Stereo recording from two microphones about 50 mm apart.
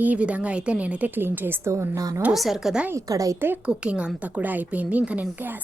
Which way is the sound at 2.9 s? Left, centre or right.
Right.